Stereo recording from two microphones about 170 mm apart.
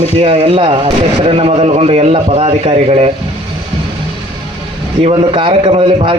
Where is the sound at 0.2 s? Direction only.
35° right (ahead or behind).